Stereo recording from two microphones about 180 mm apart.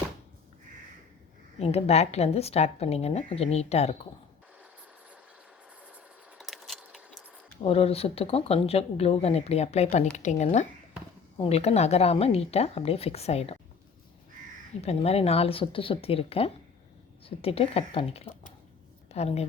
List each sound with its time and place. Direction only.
1.5 s speech: 35° left (ahead or behind)
5.8 s a sound: 5° right (ahead or behind)
7.6 s speech: 35° left (ahead or behind)
14.8 s speech: 35° left (ahead or behind)